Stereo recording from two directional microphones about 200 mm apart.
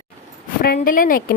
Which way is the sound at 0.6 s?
45° left (ahead or behind).